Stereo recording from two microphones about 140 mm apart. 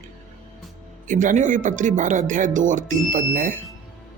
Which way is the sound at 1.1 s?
65° right (ahead or behind).